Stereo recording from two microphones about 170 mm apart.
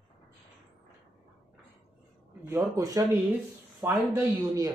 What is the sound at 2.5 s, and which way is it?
A woman's voice, 15° right (ahead or behind).